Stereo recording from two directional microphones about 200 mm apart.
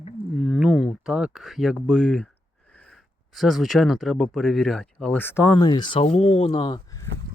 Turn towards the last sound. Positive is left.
turn(degrees=20)  # may be behind; listen again after turning